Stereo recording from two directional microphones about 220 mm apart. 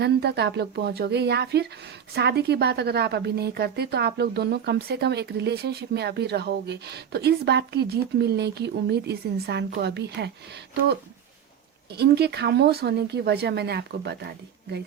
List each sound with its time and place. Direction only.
0.0 s speech: 50° right (ahead or behind)
11.9 s speech: 45° right (ahead or behind)